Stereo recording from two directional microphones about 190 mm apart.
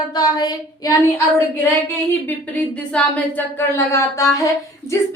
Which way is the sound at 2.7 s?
10° left (ahead or behind).